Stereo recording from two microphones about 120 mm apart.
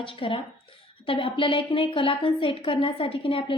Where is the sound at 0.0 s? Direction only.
45° left (ahead or behind).